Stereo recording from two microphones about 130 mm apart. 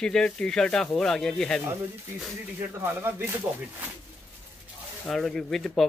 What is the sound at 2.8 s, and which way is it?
Speech, 15° right (ahead or behind).